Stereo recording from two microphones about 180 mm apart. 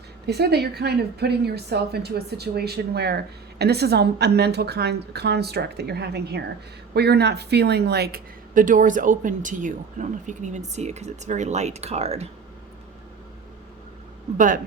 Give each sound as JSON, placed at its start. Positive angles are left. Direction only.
{"t": 0.3, "sound": "a woman's voice", "side_deg": -65}
{"t": 14.3, "sound": "speech", "side_deg": -50}